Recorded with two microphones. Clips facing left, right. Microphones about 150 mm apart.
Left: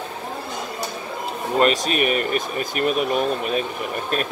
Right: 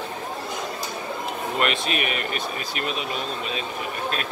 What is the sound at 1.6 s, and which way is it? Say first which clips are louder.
Speech: left 7 dB; 40° left (ahead or behind).